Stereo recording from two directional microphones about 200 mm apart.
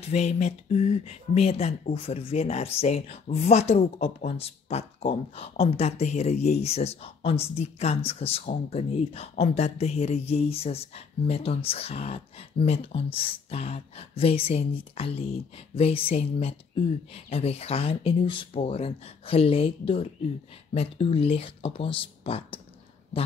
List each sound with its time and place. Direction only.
0.0 s speech: 35° left (ahead or behind)